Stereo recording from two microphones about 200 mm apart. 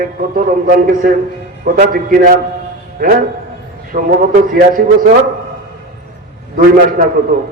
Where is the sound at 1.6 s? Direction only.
50° right (ahead or behind).